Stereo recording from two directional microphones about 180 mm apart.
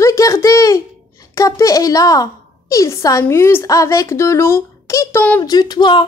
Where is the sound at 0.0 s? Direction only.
15° left (ahead or behind).